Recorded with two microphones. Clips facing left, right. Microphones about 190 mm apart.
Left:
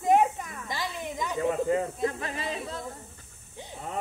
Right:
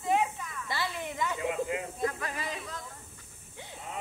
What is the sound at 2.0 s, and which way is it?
Speech, 25° left (ahead or behind).